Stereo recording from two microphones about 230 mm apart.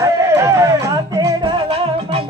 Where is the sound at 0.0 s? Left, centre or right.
Centre.